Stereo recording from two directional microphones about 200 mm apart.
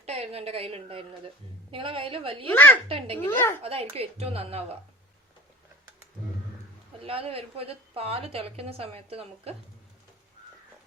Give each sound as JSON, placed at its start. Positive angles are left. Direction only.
{"t": 0.0, "sound": "a woman's voice", "side_deg": -30}
{"t": 2.5, "sound": "a woman's voice", "side_deg": 10}
{"t": 3.6, "sound": "a woman's voice", "side_deg": -30}
{"t": 7.0, "sound": "a woman's voice", "side_deg": -30}